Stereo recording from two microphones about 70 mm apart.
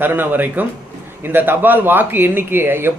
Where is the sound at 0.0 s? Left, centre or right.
Right.